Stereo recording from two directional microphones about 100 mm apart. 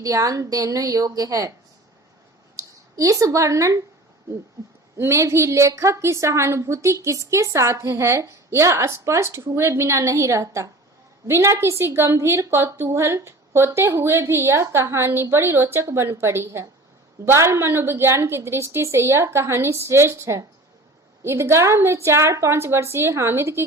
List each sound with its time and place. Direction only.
0.0 s a woman's voice: 35° right (ahead or behind)
2.6 s speech: 35° right (ahead or behind)
4.9 s a woman's voice: 30° right (ahead or behind)